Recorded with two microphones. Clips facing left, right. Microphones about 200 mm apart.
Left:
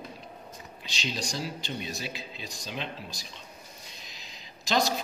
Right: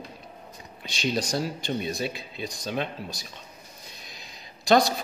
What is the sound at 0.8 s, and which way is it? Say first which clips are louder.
A man's voice: right 7 dB; 55° right (ahead or behind).